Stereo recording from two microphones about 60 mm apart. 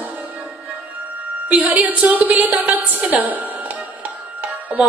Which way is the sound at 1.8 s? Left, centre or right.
Right.